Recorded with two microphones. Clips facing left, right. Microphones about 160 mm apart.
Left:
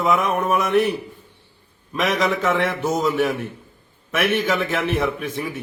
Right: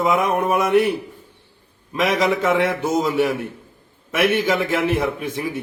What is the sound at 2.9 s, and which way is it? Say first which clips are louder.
Speech: left 1 dB; 30° right (ahead or behind).